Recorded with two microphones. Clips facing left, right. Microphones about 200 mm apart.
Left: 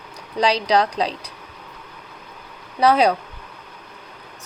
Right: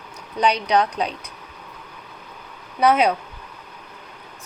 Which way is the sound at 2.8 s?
35° left (ahead or behind).